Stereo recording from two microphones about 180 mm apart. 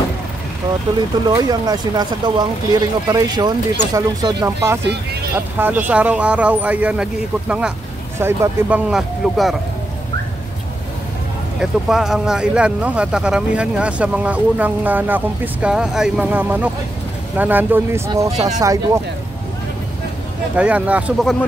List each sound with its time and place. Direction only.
1.3 s speech: 20° right (ahead or behind); by 9.6 s centre (ahead or behind)
11.6 s speech: 5° right (ahead or behind)
18.3 s speech: 40° right (ahead or behind)
20.5 s speech: 5° right (ahead or behind)